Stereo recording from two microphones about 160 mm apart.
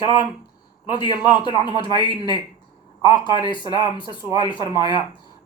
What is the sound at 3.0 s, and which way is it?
Speech, 20° right (ahead or behind).